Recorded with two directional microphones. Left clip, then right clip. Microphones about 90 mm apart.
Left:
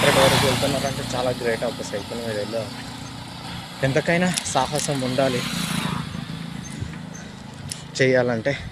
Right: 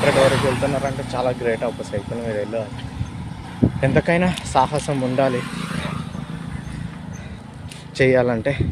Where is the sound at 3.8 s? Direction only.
30° right (ahead or behind).